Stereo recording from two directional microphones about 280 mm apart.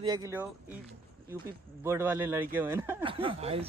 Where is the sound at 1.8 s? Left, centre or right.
Centre.